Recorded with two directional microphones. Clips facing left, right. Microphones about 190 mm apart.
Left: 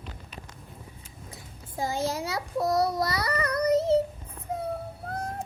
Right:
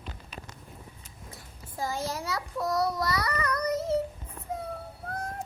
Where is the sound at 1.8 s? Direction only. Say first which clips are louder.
Left 3 dB; 25° left (ahead or behind).